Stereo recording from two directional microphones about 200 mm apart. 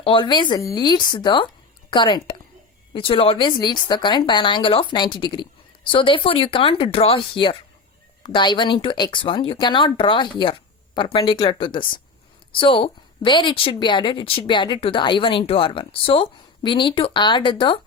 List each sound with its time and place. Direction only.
0.0 s a woman's voice: 25° left (ahead or behind)